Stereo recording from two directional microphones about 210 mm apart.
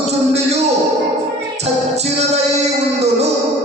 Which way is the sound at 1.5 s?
30° right (ahead or behind).